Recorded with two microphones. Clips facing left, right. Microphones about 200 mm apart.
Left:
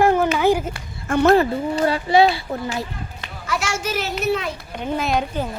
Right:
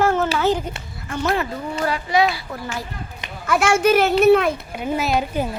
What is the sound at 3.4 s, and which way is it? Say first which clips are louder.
A child's voice: right 9 dB; 55° right (ahead or behind).